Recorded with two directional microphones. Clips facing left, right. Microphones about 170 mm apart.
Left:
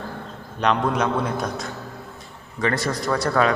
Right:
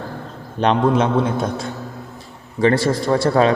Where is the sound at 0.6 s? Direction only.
30° right (ahead or behind).